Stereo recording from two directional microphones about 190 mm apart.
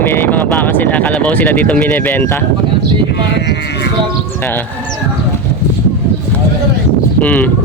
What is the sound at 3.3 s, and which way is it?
Sheep, 65° left (ahead or behind).